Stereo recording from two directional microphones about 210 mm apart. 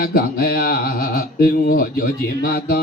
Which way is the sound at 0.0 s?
45° left (ahead or behind).